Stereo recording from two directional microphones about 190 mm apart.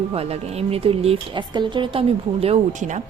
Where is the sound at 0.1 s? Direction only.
35° right (ahead or behind).